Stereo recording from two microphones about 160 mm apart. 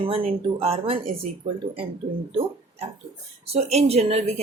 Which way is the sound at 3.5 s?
40° right (ahead or behind).